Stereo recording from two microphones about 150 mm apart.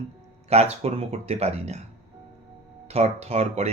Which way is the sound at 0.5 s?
45° right (ahead or behind).